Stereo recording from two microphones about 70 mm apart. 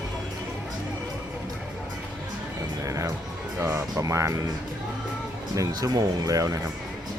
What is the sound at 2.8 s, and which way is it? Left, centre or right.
Music, right.